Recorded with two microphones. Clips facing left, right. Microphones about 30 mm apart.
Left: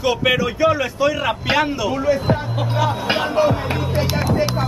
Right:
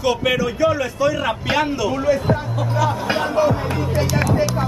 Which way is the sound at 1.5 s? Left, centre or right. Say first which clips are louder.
Even; centre.